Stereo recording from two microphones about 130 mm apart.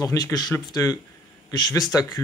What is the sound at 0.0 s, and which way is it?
Speech, 30° left (ahead or behind).